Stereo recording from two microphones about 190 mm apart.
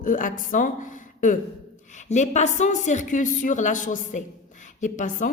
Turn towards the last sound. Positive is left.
turn(degrees=40)  # may be behind; listen again after turning